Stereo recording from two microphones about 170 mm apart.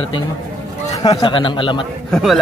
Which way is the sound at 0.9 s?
20° left (ahead or behind).